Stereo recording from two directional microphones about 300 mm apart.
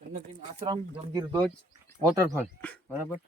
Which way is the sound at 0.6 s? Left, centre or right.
Centre.